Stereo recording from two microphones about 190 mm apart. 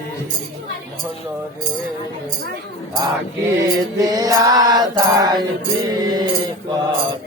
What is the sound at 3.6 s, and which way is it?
Mantra, 20° right (ahead or behind).